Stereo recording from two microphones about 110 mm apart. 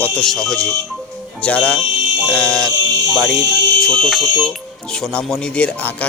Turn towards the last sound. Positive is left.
turn(degrees=10)  # may be behind; listen again after turning